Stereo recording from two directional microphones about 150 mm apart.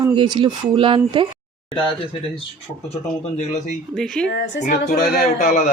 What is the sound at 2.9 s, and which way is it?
Speech, 50° left (ahead or behind).